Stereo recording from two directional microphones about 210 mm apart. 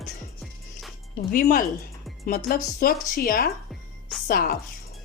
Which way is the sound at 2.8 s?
45° left (ahead or behind).